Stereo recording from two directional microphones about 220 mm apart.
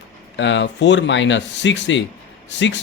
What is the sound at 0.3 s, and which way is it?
Speech, 55° left (ahead or behind).